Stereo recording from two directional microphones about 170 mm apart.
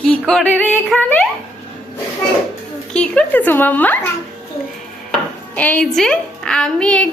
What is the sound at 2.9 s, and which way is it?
A woman's voice, 5° left (ahead or behind).